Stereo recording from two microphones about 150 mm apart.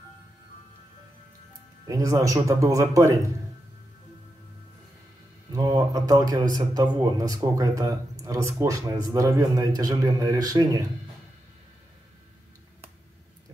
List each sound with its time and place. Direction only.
1.9 s speech: 20° right (ahead or behind)
5.5 s speech: 25° right (ahead or behind)